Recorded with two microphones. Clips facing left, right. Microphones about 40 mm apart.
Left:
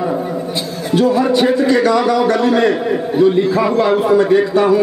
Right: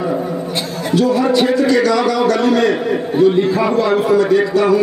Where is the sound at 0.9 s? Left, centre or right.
Left.